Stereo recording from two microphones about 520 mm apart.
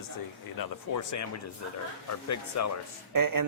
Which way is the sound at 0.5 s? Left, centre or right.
Left.